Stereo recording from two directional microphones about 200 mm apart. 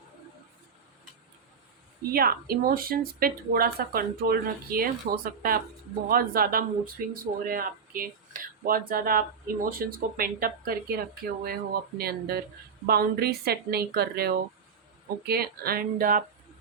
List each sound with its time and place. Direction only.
2.0 s a woman's voice: 50° right (ahead or behind)